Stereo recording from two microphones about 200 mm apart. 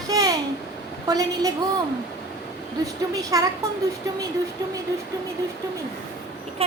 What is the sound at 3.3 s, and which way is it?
Speech, 15° right (ahead or behind).